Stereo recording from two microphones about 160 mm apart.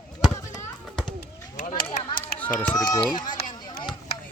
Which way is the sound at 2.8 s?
25° left (ahead or behind).